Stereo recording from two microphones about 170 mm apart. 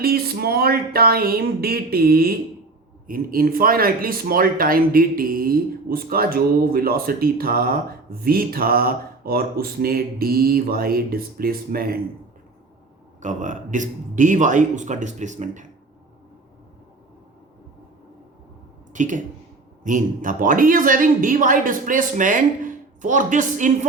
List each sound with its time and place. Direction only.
0.0 s speech: 65° right (ahead or behind)
13.2 s a woman's voice: 45° right (ahead or behind)
18.9 s a woman's voice: 50° right (ahead or behind)